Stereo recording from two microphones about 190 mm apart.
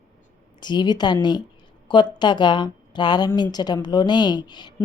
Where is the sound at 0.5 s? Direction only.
25° left (ahead or behind).